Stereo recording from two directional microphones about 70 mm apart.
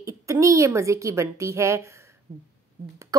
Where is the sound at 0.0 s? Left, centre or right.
Right.